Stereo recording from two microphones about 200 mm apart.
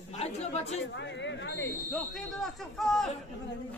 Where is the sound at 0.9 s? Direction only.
65° left (ahead or behind).